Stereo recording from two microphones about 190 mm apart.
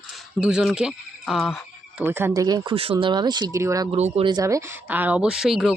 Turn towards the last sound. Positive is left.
turn(degrees=0)  # may be behind; listen again after turning